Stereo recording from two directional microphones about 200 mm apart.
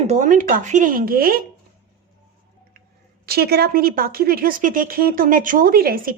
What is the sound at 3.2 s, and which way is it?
Speech, 50° right (ahead or behind).